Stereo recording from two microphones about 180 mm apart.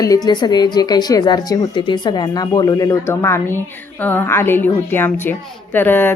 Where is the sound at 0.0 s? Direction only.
20° left (ahead or behind).